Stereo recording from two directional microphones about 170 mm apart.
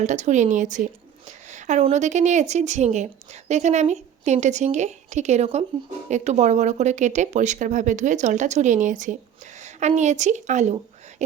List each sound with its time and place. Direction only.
0.0 s speech: 45° right (ahead or behind)